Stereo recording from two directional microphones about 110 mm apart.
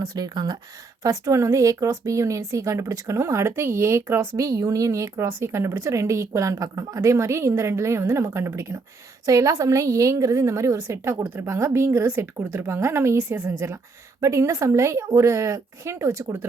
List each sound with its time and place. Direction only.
0.0 s speech: 35° right (ahead or behind)